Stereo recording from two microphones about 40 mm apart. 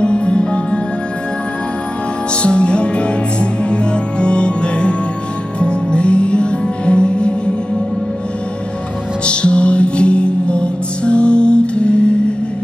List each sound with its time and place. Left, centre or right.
0.0 s music: left
2.4 s music: left
9.2 s music: left